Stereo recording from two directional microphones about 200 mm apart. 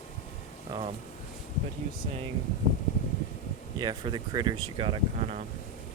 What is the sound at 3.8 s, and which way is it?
Speech, 20° right (ahead or behind).